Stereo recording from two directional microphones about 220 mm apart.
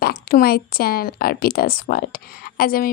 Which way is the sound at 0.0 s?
40° left (ahead or behind).